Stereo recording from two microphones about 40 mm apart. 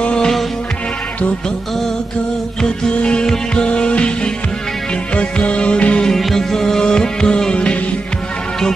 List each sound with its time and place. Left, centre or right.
0.0 s music: left
3.0 s music: left
6.0 s music: centre